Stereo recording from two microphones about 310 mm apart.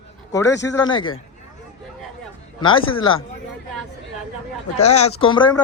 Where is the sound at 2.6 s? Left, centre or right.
Centre.